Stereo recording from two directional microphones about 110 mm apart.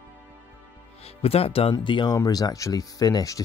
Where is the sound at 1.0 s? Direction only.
65° left (ahead or behind).